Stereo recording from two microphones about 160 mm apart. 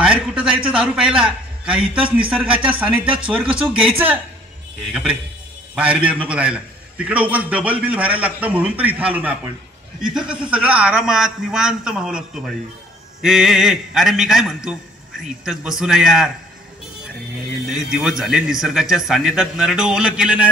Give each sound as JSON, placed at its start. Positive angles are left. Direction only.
{"t": 0.0, "sound": "a man's voice", "side_deg": -5}
{"t": 5.8, "sound": "a man's voice", "side_deg": -5}
{"t": 17.6, "sound": "speech", "side_deg": 0}